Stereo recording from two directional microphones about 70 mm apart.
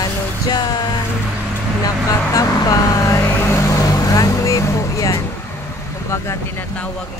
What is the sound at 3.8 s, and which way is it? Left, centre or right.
Vehicle, left.